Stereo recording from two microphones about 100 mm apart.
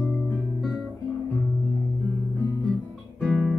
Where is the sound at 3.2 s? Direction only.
Centre (ahead or behind).